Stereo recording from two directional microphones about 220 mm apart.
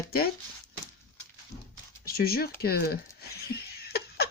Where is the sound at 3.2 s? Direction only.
45° left (ahead or behind).